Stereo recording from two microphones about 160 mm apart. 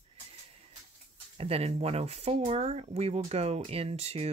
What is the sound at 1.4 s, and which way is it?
Speech, 40° right (ahead or behind).